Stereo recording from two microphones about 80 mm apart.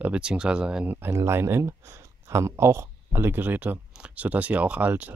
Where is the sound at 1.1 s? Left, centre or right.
Right.